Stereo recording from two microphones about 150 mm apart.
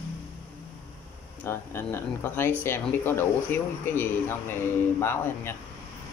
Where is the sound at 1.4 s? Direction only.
15° left (ahead or behind).